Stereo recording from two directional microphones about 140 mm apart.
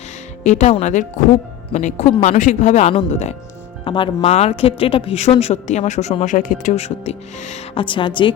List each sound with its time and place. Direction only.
0.4 s speech: 55° left (ahead or behind)
3.8 s speech: 35° left (ahead or behind); by 7.6 s 55° left (ahead or behind)
7.8 s a woman's voice: 35° left (ahead or behind)